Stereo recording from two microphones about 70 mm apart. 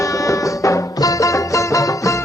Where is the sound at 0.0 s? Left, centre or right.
Left.